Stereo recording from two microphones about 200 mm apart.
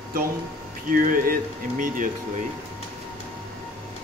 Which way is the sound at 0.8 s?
45° right (ahead or behind).